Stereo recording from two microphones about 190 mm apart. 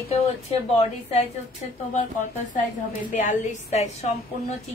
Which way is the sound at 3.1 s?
40° left (ahead or behind).